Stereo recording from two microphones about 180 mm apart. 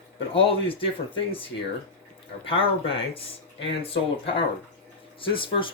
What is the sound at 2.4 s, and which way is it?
Speech, 30° left (ahead or behind).